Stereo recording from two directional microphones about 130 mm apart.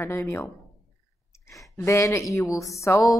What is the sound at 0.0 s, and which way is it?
Speech, 20° left (ahead or behind).